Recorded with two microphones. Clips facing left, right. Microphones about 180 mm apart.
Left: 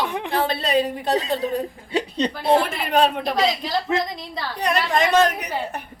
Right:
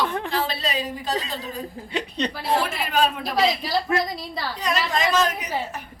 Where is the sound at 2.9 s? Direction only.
60° left (ahead or behind).